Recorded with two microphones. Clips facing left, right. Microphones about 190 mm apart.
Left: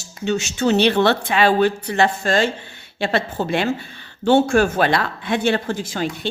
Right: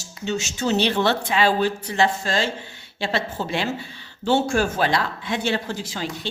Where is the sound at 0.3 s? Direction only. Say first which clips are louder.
Left 5 dB; 60° left (ahead or behind).